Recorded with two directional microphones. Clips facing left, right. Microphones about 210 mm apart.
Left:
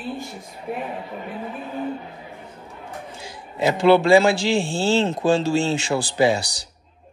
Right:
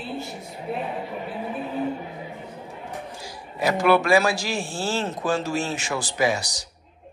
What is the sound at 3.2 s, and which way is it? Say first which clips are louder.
A man's voice: left 3 dB; 25° left (ahead or behind).